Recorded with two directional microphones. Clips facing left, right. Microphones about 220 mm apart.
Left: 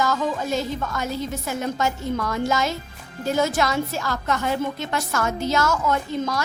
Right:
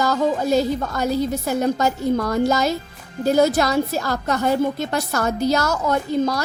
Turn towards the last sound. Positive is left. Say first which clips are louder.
# right 5 dB
turn(degrees=-35)  # may be behind; listen again after turning